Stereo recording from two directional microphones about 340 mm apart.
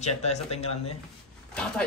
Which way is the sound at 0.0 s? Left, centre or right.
Centre.